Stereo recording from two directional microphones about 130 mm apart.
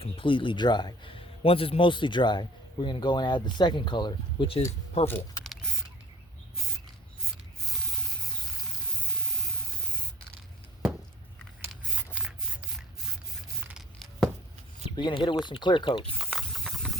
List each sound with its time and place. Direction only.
0.0 s a man's voice: 40° left (ahead or behind)
5.0 s speech: 20° left (ahead or behind)
5.4 s typing: centre (ahead or behind)
11.7 s scissors: 10° right (ahead or behind)
14.9 s a man's voice: 40° left (ahead or behind)
16.1 s hiss: centre (ahead or behind)